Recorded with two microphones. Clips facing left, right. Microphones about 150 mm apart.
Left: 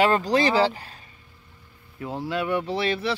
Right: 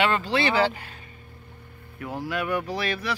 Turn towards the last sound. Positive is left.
turn(degrees=30)  # may be behind; listen again after turning